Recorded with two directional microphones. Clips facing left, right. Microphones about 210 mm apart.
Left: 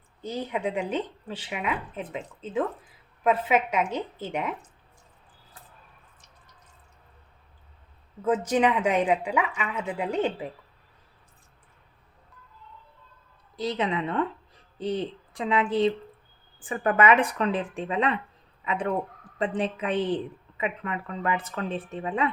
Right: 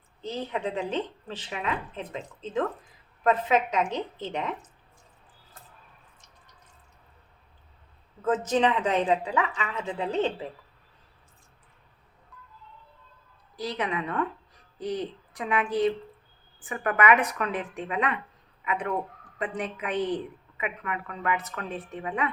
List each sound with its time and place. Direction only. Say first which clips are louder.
0.2 s a woman's voice: left 1 dB; 10° left (ahead or behind)
8.2 s a woman's voice: left 1 dB; 10° left (ahead or behind)
13.6 s a woman's voice: left 3 dB; 25° left (ahead or behind)